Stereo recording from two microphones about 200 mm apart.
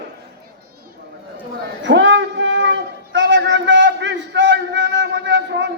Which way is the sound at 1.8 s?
65° right (ahead or behind).